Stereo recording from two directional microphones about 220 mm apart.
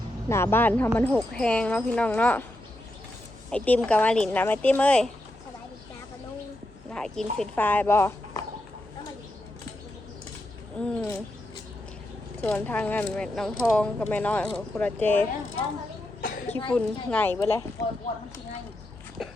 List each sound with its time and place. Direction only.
0.3 s speech: 10° left (ahead or behind)
3.5 s speech: 5° left (ahead or behind)
6.9 s speech: centre (ahead or behind)
10.8 s speech: 5° left (ahead or behind)
12.4 s speech: 5° left (ahead or behind)
16.2 s cough: 40° left (ahead or behind)
16.7 s speech: 5° left (ahead or behind)